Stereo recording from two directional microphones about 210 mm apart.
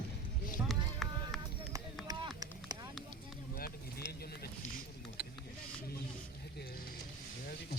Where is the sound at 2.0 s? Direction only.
20° right (ahead or behind).